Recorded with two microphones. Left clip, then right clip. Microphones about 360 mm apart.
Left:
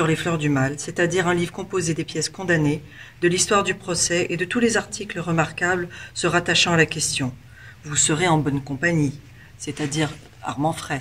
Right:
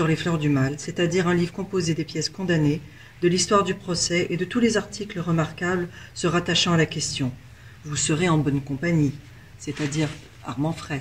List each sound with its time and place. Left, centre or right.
0.0 s speech: left
9.6 s speech: left